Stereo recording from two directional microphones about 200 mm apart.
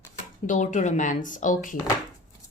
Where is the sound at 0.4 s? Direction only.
40° left (ahead or behind).